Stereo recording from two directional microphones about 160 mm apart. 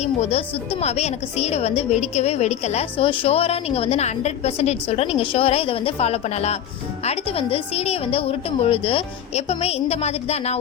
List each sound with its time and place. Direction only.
0.0 s a woman's voice: 40° left (ahead or behind)